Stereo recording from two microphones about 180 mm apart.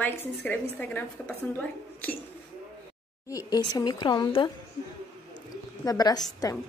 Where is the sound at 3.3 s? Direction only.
20° left (ahead or behind).